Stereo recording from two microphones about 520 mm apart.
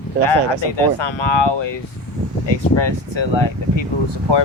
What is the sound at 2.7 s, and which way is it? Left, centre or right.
Speech, left.